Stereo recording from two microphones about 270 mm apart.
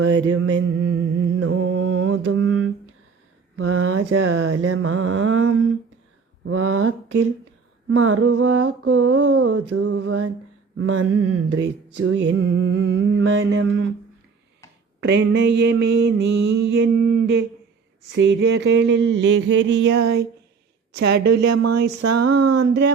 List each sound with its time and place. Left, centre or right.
0.0 s mantra: right
3.5 s a sound: right
15.0 s mantra: right
21.5 s speech: right
22.5 s mantra: right